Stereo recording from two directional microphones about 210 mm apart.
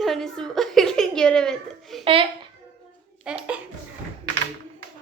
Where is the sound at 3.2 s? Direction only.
5° right (ahead or behind).